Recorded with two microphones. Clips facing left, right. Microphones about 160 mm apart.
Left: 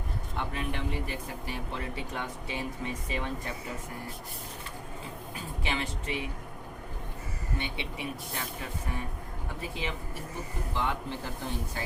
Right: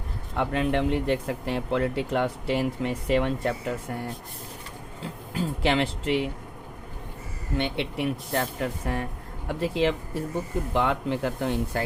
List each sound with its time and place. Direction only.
0.3 s speech: 90° right; by 3.8 s 70° right (ahead or behind)
5.3 s speech: 80° right
7.5 s speech: 75° right (ahead or behind)
10.8 s speech: 90° right